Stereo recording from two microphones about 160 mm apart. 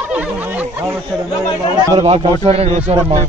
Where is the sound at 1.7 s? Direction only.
25° right (ahead or behind).